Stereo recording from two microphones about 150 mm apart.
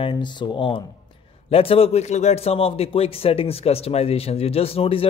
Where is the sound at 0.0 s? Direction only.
30° left (ahead or behind).